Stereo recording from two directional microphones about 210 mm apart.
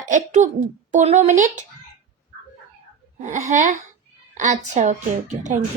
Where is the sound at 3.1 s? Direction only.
35° right (ahead or behind).